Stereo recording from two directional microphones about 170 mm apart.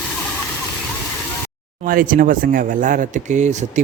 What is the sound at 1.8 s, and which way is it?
Speech, 55° right (ahead or behind).